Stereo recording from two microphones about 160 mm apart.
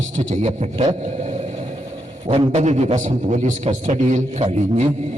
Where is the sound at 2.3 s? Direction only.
40° right (ahead or behind).